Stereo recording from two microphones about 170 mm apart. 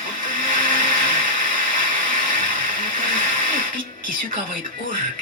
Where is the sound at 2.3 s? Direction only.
55° right (ahead or behind).